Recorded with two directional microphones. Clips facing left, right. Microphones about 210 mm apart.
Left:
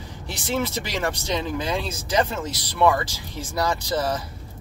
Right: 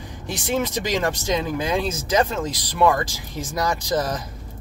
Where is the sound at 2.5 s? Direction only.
15° right (ahead or behind).